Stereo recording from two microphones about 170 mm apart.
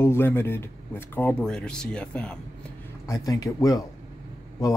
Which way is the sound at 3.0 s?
20° left (ahead or behind).